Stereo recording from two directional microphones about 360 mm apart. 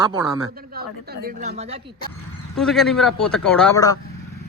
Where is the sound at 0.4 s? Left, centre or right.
Right.